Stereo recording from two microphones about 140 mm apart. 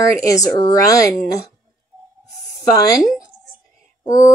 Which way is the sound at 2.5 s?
25° left (ahead or behind).